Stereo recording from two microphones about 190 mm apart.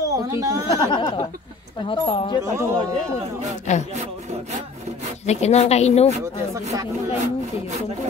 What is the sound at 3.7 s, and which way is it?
Speech, 40° left (ahead or behind).